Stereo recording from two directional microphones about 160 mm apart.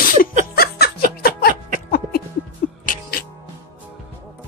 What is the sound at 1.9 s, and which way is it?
Music, 70° left (ahead or behind).